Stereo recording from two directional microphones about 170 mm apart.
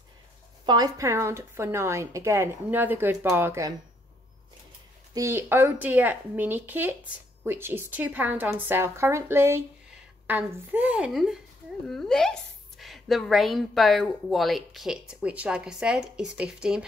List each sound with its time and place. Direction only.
0.7 s a woman's voice: 25° right (ahead or behind)
5.1 s a woman's voice: 15° right (ahead or behind)